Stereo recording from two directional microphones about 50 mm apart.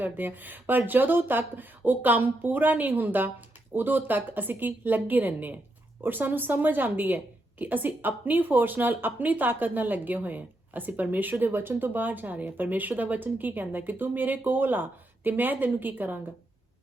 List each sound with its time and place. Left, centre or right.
0.0 s speech: right